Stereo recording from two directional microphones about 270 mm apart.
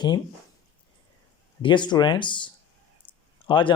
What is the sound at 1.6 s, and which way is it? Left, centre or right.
A man's voice, centre.